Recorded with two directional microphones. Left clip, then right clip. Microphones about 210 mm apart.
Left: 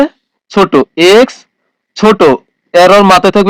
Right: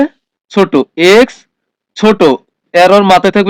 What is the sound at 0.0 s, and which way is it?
Speech, 25° left (ahead or behind).